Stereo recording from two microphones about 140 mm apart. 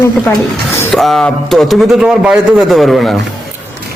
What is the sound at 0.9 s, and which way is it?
A man's voice, centre (ahead or behind).